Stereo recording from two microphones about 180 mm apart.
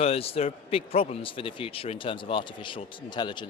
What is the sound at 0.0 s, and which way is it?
A man's voice, 35° left (ahead or behind).